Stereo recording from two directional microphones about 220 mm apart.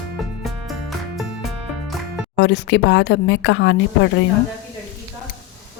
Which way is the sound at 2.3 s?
50° left (ahead or behind).